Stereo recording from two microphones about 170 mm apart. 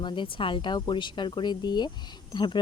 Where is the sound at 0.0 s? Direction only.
30° left (ahead or behind).